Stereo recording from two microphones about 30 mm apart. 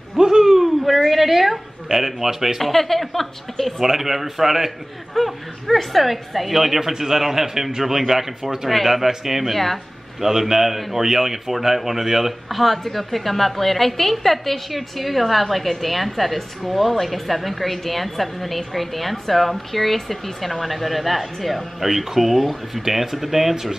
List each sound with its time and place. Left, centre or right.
0.2 s a sound: centre
0.9 s speech: centre
2.6 s a woman's voice: centre
3.8 s speech: centre
9.5 s a woman's voice: centre
10.2 s speech: centre
21.7 s speech: centre
23.5 s speech: centre